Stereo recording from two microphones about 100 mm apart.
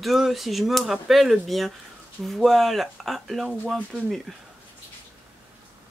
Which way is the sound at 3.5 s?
10° right (ahead or behind).